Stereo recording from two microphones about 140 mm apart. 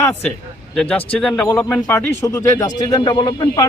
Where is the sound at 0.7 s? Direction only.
5° left (ahead or behind).